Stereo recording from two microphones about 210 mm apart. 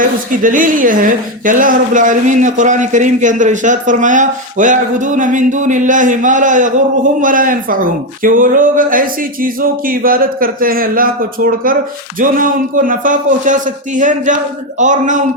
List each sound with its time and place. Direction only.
0.0 s a woman's voice: 40° right (ahead or behind)